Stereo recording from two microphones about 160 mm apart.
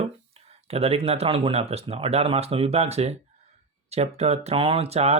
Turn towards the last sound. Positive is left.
turn(degrees=-40)  # may be behind; listen again after turning